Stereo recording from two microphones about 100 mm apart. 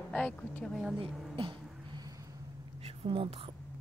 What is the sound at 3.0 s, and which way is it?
Speech, 65° right (ahead or behind).